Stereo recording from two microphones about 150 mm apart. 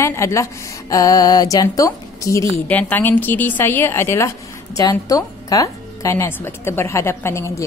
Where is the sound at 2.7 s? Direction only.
10° left (ahead or behind).